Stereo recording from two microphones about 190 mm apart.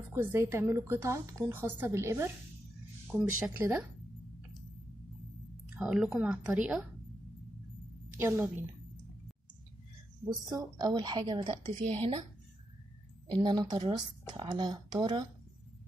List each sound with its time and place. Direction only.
0.1 s a woman's voice: 15° right (ahead or behind)
5.8 s a woman's voice: 5° right (ahead or behind)
8.2 s a woman's voice: 10° right (ahead or behind)
10.2 s a woman's voice: 20° right (ahead or behind)
13.4 s speech: 20° right (ahead or behind)